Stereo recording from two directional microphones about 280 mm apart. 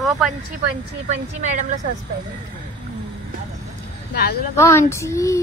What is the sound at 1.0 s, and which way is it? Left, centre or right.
Speech, right.